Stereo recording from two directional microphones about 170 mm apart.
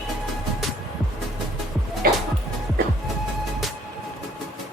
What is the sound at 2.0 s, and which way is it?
Music, 60° right (ahead or behind).